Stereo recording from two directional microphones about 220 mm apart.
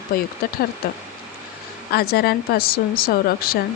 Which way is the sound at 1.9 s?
45° left (ahead or behind).